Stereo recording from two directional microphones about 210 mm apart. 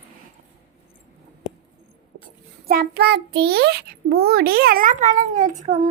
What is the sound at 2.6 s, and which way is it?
A child's voice, 45° right (ahead or behind).